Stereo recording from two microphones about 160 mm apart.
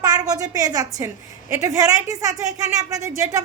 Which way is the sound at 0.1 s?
25° right (ahead or behind).